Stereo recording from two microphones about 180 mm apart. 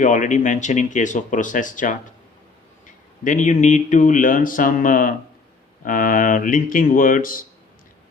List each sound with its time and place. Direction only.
0.0 s speech: 45° left (ahead or behind)